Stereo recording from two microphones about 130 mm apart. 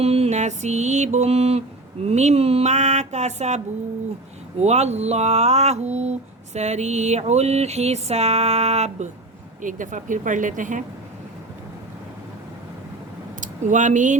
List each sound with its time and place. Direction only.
0.0 s speech: 55° right (ahead or behind)
4.6 s speech: 55° right (ahead or behind)
9.6 s speech: 90° right
13.4 s speech: 70° right (ahead or behind)